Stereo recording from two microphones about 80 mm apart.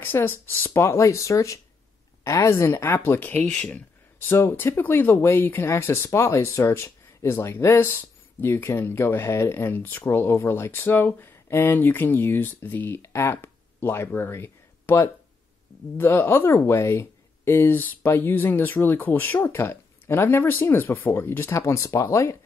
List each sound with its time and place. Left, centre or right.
0.0 s speech: left
3.1 s speech: left
4.2 s speech: left